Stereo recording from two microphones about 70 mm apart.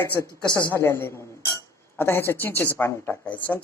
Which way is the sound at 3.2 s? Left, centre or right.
Left.